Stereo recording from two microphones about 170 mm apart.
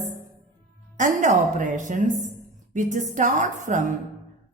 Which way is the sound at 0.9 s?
50° right (ahead or behind).